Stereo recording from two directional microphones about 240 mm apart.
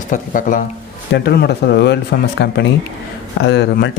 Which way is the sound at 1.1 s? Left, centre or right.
Left.